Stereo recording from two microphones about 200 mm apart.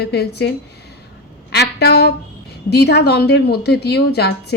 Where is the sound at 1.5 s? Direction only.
55° left (ahead or behind).